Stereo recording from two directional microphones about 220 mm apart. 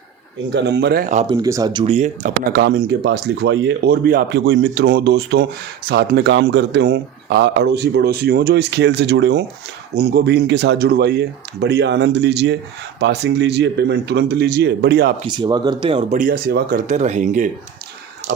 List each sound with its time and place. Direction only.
0.5 s speech: 50° right (ahead or behind)
1.3 s speech: 15° right (ahead or behind)
2.5 s speech: 45° right (ahead or behind)
15.2 s speech: 20° right (ahead or behind)